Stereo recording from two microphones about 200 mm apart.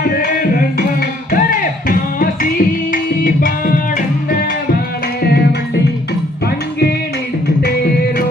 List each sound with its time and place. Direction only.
0.0 s music: 45° left (ahead or behind)
5.2 s music: 50° left (ahead or behind)
7.4 s music: 50° left (ahead or behind)